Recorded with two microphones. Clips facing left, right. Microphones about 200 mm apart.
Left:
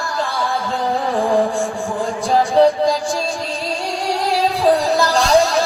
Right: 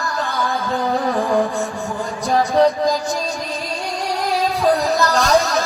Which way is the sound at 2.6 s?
30° left (ahead or behind).